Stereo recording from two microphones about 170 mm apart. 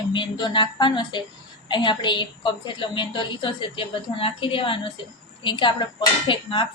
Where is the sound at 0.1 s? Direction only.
25° left (ahead or behind).